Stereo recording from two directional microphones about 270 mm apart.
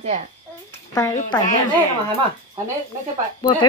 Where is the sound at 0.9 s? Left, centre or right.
Centre.